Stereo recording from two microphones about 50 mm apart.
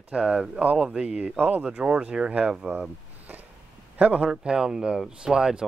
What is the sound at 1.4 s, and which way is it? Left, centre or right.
Speech, right.